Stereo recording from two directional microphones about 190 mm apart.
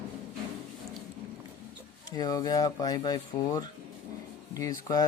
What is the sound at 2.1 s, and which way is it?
Speech, 20° left (ahead or behind).